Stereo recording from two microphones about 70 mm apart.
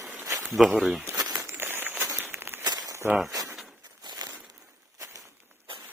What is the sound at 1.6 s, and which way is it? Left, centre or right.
Walk, right.